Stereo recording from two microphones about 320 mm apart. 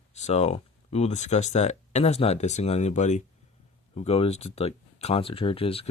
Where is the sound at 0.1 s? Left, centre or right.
Left.